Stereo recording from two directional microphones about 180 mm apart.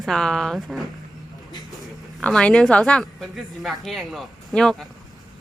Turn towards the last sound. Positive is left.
turn(degrees=0)  # may be behind; listen again after turning